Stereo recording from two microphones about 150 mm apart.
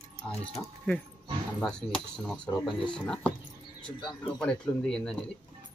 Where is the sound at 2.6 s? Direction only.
Centre (ahead or behind).